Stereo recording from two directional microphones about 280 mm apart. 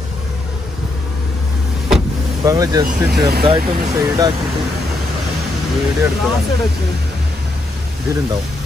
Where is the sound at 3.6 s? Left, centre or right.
Right.